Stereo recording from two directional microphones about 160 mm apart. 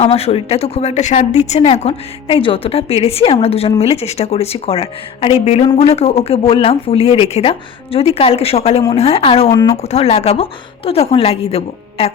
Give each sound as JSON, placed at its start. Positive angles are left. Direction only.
{"t": 0.0, "sound": "a woman's voice", "side_deg": 40}
{"t": 9.5, "sound": "speech", "side_deg": 20}
{"t": 9.8, "sound": "a woman's voice", "side_deg": 40}